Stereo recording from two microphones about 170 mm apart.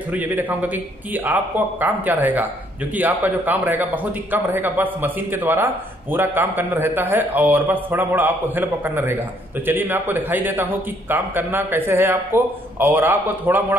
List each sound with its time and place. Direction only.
0.1 s a man's voice: 10° right (ahead or behind)